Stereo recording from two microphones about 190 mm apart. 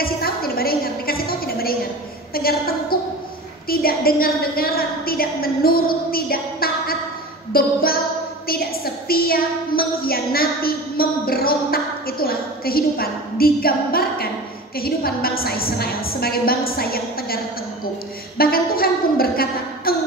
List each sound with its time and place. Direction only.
0.0 s a sound: 50° left (ahead or behind)
8.5 s a woman's voice: 50° left (ahead or behind)
18.4 s a woman's voice: 50° left (ahead or behind)